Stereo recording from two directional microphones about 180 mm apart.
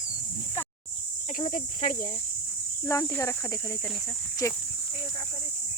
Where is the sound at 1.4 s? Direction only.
45° left (ahead or behind).